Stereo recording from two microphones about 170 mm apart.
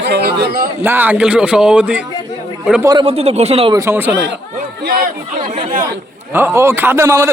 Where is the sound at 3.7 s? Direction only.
15° right (ahead or behind).